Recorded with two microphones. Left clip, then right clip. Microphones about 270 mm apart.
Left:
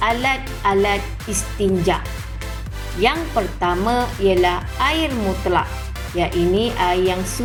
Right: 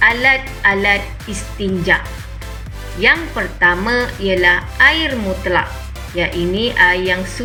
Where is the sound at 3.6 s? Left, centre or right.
Left.